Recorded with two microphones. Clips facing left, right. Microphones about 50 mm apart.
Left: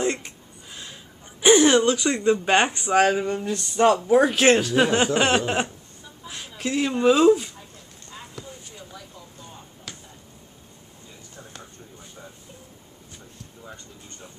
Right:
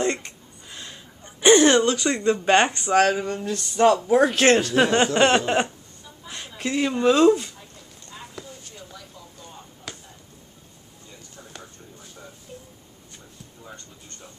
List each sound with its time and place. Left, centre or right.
0.0 s a sound: centre
3.6 s speech: centre
8.1 s clip-clop: centre